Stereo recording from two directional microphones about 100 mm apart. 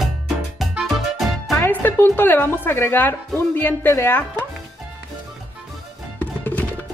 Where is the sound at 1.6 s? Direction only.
20° left (ahead or behind).